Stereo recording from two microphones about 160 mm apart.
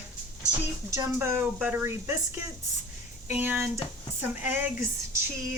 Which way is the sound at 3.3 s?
10° right (ahead or behind).